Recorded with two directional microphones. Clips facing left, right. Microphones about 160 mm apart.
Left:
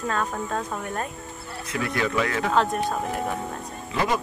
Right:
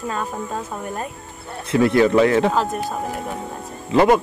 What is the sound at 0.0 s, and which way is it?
Speech, 10° right (ahead or behind).